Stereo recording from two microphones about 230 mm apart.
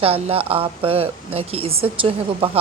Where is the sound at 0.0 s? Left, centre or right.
Right.